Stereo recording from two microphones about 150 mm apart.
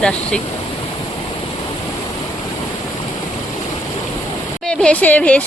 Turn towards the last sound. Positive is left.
turn(degrees=10)  # may be behind; listen again after turning